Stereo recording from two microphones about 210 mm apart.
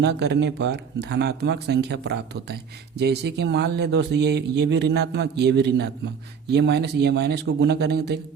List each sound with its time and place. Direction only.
0.0 s speech: 55° right (ahead or behind)